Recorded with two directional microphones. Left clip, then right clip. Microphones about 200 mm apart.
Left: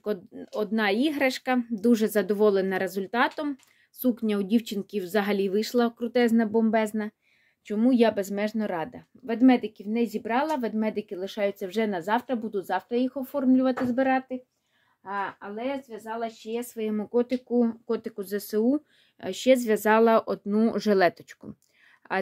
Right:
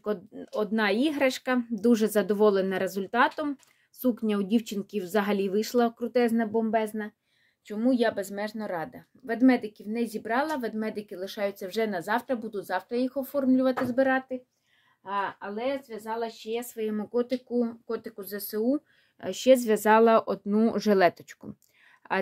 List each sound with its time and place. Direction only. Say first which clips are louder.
0.0 s speech: left 1 dB; 15° left (ahead or behind); by 7.1 s 35° left (ahead or behind)
7.6 s a woman's voice: left 3 dB; 45° left (ahead or behind)
15.0 s a woman's voice: right 1 dB; 25° left (ahead or behind); by 18.8 s 40° left (ahead or behind)
19.1 s speech: right 1 dB; 10° left (ahead or behind)